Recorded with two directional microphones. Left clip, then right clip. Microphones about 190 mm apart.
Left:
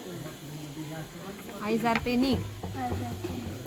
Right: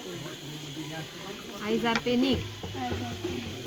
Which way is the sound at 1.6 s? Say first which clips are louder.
Even; 35° left (ahead or behind).